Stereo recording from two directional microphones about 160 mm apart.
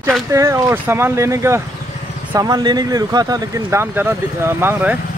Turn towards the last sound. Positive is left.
turn(degrees=-15)  # may be behind; listen again after turning